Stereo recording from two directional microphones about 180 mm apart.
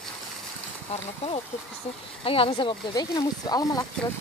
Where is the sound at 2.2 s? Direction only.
30° left (ahead or behind).